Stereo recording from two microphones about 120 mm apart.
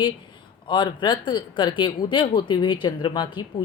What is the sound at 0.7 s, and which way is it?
Speech, 40° left (ahead or behind).